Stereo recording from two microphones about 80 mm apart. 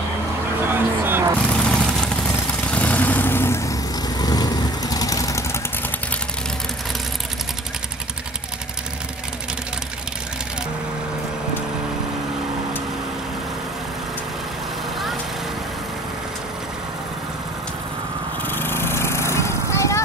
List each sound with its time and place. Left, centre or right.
0.7 s vehicle: right
1.4 s vehicle: centre; by 3.7 s left
4.2 s vehicle: left
18.4 s lawn mower: left